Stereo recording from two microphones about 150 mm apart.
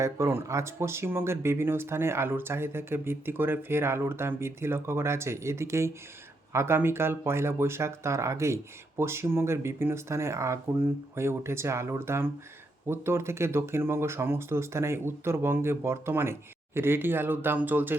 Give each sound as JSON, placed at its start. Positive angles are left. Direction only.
{"t": 0.0, "sound": "speech", "side_deg": -15}